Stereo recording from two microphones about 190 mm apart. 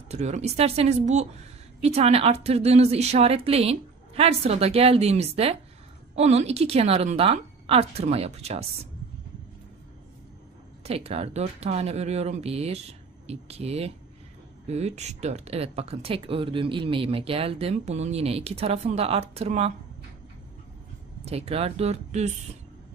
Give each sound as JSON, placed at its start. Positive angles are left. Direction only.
{"t": 0.1, "sound": "speech", "side_deg": -35}
{"t": 10.8, "sound": "speech", "side_deg": -35}
{"t": 21.3, "sound": "speech", "side_deg": -30}